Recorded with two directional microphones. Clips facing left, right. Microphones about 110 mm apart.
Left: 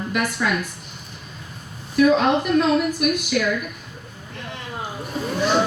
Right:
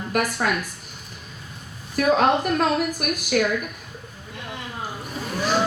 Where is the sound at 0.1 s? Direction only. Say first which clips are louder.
Right 1 dB; 45° right (ahead or behind).